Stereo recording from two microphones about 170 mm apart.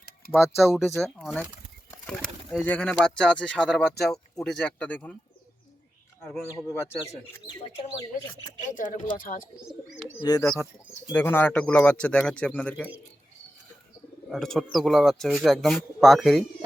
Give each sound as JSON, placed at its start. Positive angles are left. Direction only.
{"t": 0.6, "sound": "speech", "side_deg": 0}
{"t": 8.7, "sound": "speech", "side_deg": 50}
{"t": 9.6, "sound": "speech", "side_deg": -5}
{"t": 10.2, "sound": "a man's voice", "side_deg": 20}
{"t": 14.3, "sound": "speech", "side_deg": 5}